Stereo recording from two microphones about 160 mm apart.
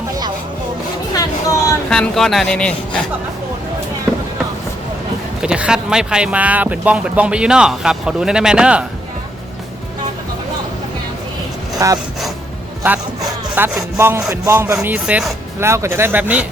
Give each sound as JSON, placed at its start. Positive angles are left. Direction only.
{"t": 1.1, "sound": "a sound", "side_deg": 20}
{"t": 1.9, "sound": "speech", "side_deg": 5}
{"t": 5.4, "sound": "speech", "side_deg": -5}
{"t": 11.8, "sound": "speech", "side_deg": -20}
{"t": 13.6, "sound": "speech", "side_deg": -15}